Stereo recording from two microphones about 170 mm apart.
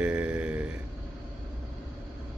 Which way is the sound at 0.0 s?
5° right (ahead or behind).